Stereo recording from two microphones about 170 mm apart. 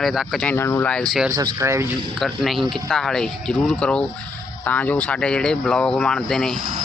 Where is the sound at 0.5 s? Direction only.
15° left (ahead or behind).